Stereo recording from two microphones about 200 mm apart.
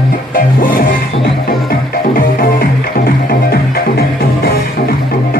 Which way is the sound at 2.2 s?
45° left (ahead or behind).